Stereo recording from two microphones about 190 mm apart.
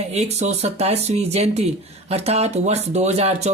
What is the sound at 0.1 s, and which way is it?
Speech, 35° right (ahead or behind).